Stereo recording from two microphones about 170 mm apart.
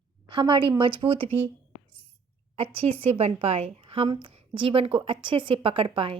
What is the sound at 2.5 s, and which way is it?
A woman's voice, 35° right (ahead or behind).